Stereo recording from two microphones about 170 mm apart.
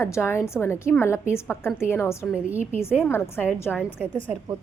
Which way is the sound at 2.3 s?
10° right (ahead or behind).